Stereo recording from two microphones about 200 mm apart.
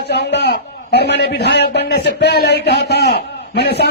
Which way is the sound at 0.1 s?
55° left (ahead or behind).